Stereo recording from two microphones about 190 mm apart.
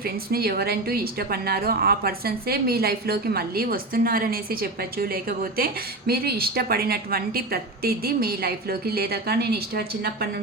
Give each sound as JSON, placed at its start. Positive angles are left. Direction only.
{"t": 0.0, "sound": "a woman's voice", "side_deg": -55}